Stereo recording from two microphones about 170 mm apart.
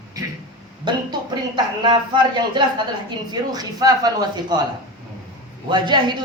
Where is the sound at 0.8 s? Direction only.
25° right (ahead or behind).